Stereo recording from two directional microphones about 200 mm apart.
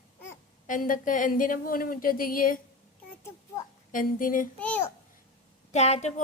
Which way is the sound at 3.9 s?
45° left (ahead or behind).